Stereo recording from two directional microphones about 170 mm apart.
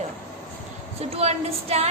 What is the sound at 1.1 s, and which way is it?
Speech, 35° right (ahead or behind).